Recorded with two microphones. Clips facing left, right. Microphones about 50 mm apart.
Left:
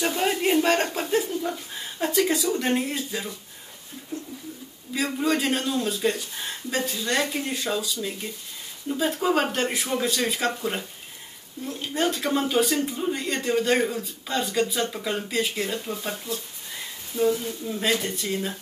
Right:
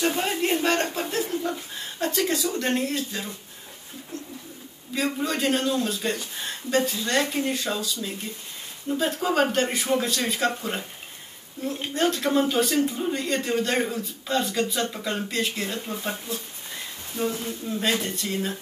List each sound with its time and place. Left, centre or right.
0.2 s a sound: centre
2.0 s speech: centre
4.9 s speech: centre
11.9 s speech: centre
15.8 s speech: centre
17.3 s a man's voice: right
17.6 s speech: centre